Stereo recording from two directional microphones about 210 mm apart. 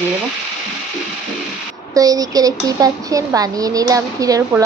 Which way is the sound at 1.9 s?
15° right (ahead or behind).